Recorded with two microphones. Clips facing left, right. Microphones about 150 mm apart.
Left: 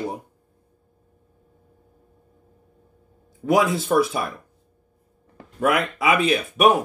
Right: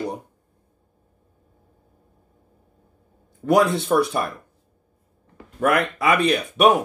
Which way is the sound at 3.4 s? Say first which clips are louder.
Right 2 dB; centre (ahead or behind).